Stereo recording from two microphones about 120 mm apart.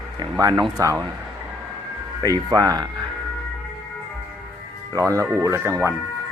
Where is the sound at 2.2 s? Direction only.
30° right (ahead or behind).